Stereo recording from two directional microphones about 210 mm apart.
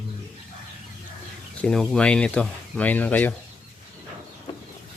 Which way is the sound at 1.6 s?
5° left (ahead or behind).